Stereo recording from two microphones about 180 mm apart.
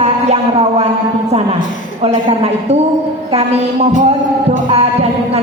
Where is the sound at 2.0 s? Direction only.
35° right (ahead or behind).